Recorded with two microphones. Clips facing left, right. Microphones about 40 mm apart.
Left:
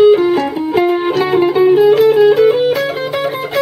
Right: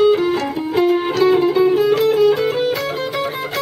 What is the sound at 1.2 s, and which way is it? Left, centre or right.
Music, left.